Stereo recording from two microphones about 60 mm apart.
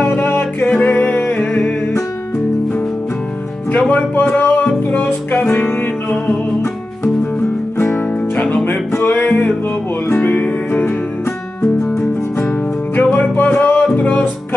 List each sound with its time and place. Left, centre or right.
0.0 s music: left
0.7 s music: left
3.9 s a sound: left
4.4 s music: left
7.8 s music: left
9.1 s music: centre
10.0 s music: left
13.1 s music: left